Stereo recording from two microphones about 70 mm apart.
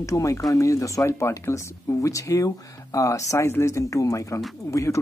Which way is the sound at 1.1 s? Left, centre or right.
Left.